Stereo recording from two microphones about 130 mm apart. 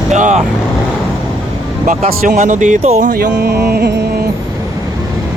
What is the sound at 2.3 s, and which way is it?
Speech, 70° right (ahead or behind).